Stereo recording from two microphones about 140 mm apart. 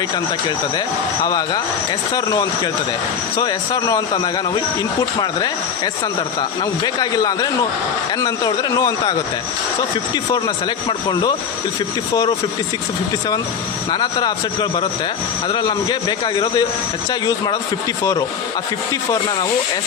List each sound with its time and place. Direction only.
1.2 s speech: 25° left (ahead or behind)
10.3 s a man's voice: 30° left (ahead or behind)
13.9 s a man's voice: 30° left (ahead or behind)